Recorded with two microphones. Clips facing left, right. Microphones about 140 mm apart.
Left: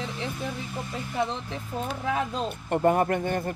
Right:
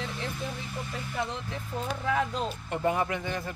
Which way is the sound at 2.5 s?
50° left (ahead or behind).